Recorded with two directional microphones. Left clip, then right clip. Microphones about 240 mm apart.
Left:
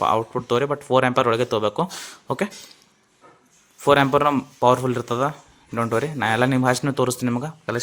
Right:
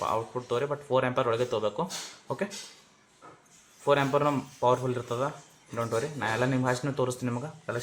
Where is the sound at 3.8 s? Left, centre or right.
Left.